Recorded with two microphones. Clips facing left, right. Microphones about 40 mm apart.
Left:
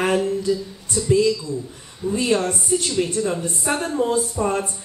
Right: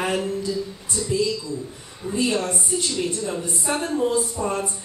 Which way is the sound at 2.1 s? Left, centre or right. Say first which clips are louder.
Left 2 dB; left.